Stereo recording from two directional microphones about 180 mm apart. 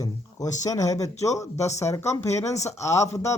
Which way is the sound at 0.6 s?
20° left (ahead or behind).